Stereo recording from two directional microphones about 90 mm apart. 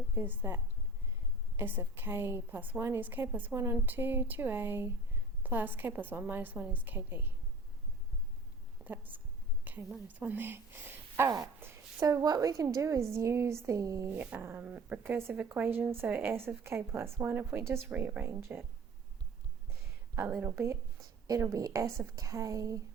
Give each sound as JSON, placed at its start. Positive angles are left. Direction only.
{"t": 0.1, "sound": "speech", "side_deg": -25}
{"t": 8.8, "sound": "a woman's voice", "side_deg": -20}
{"t": 9.7, "sound": "a sound", "side_deg": -20}
{"t": 10.2, "sound": "speech", "side_deg": -20}
{"t": 11.6, "sound": "a sound", "side_deg": -30}
{"t": 12.0, "sound": "a woman's voice", "side_deg": -45}
{"t": 14.1, "sound": "dog", "side_deg": -20}
{"t": 14.4, "sound": "speech", "side_deg": -25}
{"t": 20.1, "sound": "a woman's voice", "side_deg": -25}